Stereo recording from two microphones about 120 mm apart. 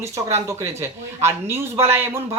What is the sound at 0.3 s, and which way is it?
A man's voice, 25° right (ahead or behind).